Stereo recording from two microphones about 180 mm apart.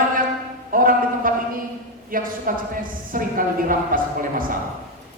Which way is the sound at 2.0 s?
50° right (ahead or behind).